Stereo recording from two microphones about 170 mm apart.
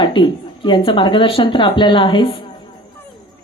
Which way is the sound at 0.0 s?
30° left (ahead or behind).